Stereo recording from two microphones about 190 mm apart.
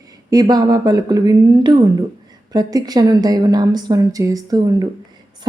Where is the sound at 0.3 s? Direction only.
20° right (ahead or behind).